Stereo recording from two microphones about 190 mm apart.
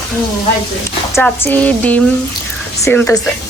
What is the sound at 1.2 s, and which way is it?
Speech, 10° left (ahead or behind).